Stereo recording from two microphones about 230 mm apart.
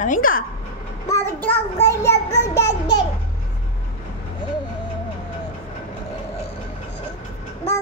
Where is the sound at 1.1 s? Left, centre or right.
Centre.